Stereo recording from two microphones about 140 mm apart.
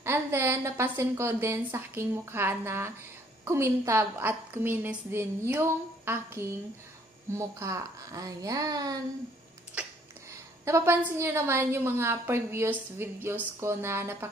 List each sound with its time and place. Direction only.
0.0 s a woman's voice: 15° right (ahead or behind)
9.8 s a sound: 10° right (ahead or behind)
10.6 s a woman's voice: 20° right (ahead or behind)